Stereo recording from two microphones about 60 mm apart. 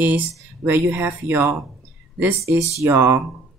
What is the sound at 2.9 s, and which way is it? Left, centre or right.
Speech, right.